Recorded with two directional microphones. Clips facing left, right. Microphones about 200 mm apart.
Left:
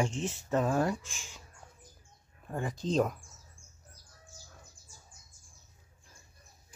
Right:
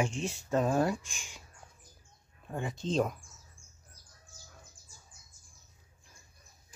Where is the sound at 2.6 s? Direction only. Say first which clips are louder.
Left 1 dB; 25° right (ahead or behind).